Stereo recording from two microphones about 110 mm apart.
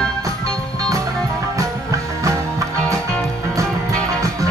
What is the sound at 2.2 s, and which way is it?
Music, 30° right (ahead or behind).